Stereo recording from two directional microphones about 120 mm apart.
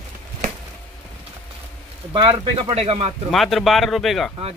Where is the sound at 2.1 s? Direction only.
45° right (ahead or behind).